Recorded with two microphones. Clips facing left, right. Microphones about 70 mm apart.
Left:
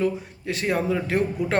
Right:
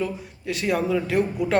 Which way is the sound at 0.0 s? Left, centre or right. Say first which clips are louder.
Left 3 dB; left.